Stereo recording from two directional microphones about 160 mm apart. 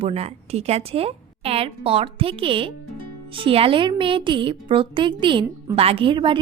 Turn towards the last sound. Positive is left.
turn(degrees=-30)  # may be behind; listen again after turning